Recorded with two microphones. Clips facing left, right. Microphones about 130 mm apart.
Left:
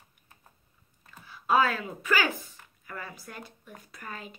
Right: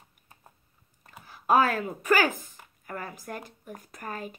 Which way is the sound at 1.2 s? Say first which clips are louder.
Right 2 dB; 45° right (ahead or behind).